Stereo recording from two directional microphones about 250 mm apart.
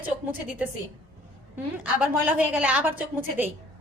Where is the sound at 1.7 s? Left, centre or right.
Centre.